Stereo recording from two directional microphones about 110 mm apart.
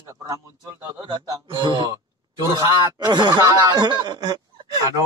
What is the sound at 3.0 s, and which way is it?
A man's voice, 40° right (ahead or behind).